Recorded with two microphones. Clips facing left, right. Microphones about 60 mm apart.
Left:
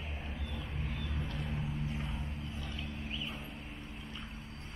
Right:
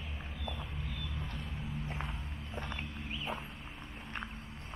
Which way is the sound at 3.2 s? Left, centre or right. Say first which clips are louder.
Right 4 dB; right.